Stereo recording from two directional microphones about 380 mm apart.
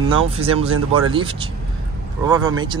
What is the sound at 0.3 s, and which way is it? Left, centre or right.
Speech, centre.